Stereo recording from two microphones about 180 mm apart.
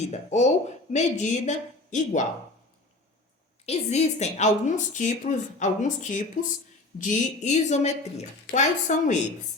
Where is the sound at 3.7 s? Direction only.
40° left (ahead or behind).